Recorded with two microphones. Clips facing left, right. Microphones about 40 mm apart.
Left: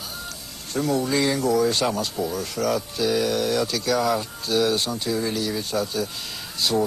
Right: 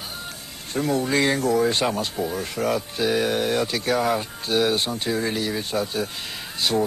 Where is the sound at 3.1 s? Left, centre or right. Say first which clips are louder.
Even; right.